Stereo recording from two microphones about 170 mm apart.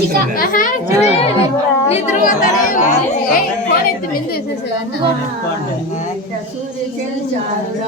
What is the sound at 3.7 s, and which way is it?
Speech, 60° left (ahead or behind).